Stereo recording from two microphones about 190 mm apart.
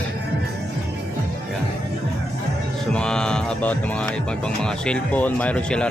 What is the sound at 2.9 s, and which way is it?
Music, 5° left (ahead or behind).